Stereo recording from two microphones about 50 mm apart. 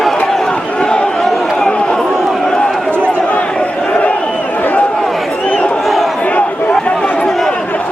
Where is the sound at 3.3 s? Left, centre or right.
Left.